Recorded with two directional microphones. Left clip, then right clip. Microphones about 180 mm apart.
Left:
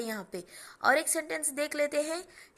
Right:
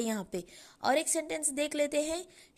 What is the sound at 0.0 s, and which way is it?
A woman's voice, 40° right (ahead or behind).